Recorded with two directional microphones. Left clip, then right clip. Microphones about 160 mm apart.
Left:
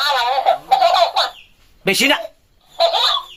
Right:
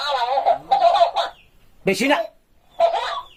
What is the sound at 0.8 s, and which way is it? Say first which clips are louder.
Bird: left 2 dB; 20° left (ahead or behind).